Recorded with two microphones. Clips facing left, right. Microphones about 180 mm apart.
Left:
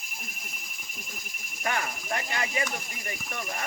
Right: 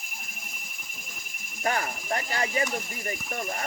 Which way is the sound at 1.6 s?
35° right (ahead or behind).